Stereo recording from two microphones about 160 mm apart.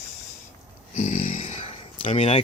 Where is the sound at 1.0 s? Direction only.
45° left (ahead or behind).